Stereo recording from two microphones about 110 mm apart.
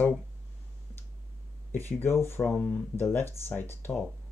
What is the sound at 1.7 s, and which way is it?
Speech, 20° left (ahead or behind).